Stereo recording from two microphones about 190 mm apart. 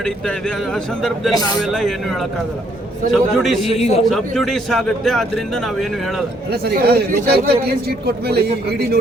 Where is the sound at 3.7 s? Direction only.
35° left (ahead or behind).